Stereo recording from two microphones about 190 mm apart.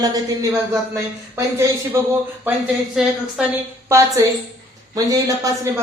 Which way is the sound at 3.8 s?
15° right (ahead or behind).